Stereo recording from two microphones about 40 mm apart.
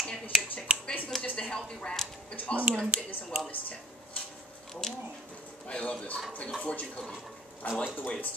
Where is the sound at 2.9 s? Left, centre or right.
Right.